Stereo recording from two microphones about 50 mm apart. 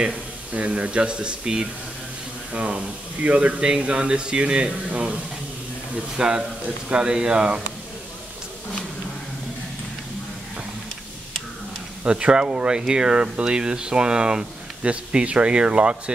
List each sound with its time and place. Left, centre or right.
0.0 s speech: right
12.0 s speech: right